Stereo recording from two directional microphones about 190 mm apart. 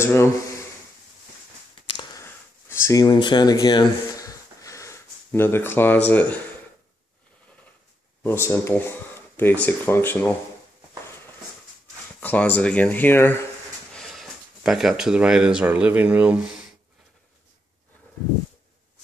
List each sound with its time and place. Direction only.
0.0 s speech: 15° left (ahead or behind)
2.9 s a sound: 20° left (ahead or behind)
6.0 s speech: 10° left (ahead or behind)
8.2 s speech: 15° left (ahead or behind)
12.2 s speech: 10° left (ahead or behind)